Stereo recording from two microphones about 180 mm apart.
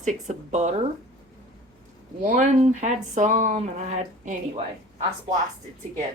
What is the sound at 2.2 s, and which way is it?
Speech, 45° right (ahead or behind).